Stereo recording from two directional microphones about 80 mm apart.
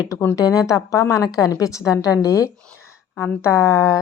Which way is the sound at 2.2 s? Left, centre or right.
Left.